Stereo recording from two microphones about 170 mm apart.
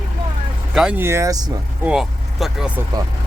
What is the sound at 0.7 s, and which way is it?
Speech, 5° right (ahead or behind).